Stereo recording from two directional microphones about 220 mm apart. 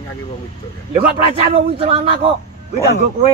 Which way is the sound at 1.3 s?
25° right (ahead or behind).